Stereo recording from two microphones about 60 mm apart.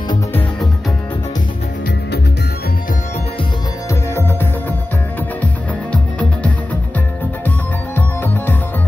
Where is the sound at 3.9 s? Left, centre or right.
Left.